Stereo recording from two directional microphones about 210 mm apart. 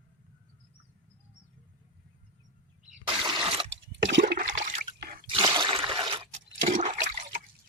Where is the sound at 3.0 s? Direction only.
25° right (ahead or behind).